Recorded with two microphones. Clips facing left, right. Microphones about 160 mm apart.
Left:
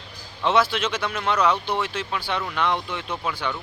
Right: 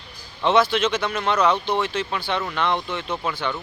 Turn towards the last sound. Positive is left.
turn(degrees=10)  # may be behind; listen again after turning